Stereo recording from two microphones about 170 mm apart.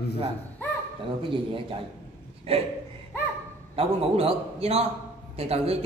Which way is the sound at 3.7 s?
35° right (ahead or behind).